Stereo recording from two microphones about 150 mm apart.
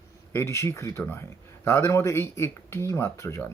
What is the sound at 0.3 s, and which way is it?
A man's voice, 20° left (ahead or behind).